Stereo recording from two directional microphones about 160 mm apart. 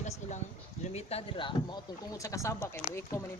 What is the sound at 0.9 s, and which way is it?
Speech, 40° left (ahead or behind).